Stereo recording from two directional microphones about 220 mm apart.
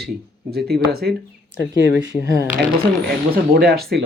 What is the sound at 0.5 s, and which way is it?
Speech, 45° right (ahead or behind).